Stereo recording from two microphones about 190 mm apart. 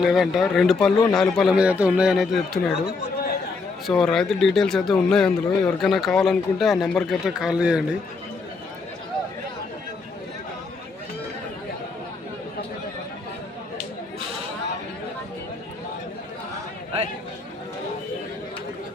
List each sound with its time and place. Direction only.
0.0 s speech: centre (ahead or behind)
3.2 s chatter: 55° left (ahead or behind)
3.8 s speech: centre (ahead or behind)